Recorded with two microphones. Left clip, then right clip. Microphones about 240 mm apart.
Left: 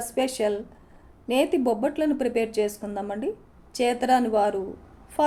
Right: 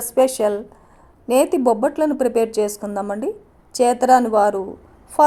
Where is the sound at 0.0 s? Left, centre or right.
Right.